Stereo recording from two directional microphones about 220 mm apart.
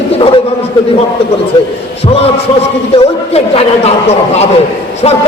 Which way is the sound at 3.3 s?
30° left (ahead or behind).